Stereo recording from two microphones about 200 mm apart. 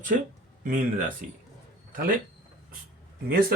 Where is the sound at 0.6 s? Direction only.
40° right (ahead or behind).